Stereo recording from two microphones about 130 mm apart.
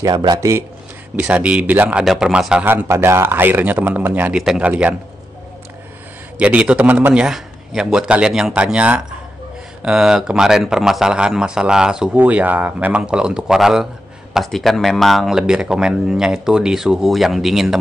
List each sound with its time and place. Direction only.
0.0 s speech: 30° right (ahead or behind)
1.1 s speech: 10° right (ahead or behind)
6.3 s speech: 10° right (ahead or behind)